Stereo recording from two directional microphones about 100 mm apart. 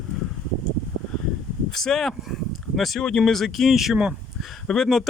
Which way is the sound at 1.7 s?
5° left (ahead or behind).